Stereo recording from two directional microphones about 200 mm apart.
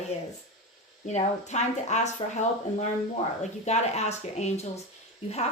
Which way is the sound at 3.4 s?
35° left (ahead or behind).